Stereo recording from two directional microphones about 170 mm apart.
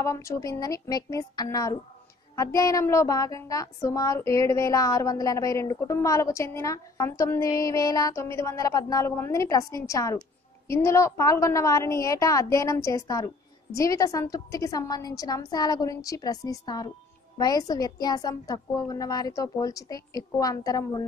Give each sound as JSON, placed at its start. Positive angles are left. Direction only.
{"t": 0.0, "sound": "speech", "side_deg": 15}